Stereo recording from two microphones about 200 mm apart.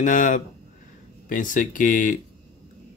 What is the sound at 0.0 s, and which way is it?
Speech, 40° left (ahead or behind).